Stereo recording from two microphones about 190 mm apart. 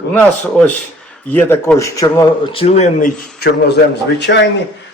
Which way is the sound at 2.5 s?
30° left (ahead or behind).